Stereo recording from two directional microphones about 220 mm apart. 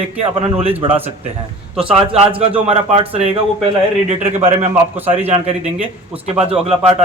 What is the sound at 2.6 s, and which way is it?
A man's voice, 25° right (ahead or behind).